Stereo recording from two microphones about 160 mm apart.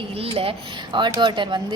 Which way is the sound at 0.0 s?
35° right (ahead or behind).